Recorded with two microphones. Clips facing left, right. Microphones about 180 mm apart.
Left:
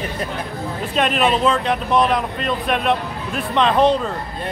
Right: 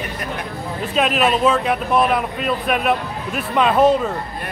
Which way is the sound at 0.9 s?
Centre (ahead or behind).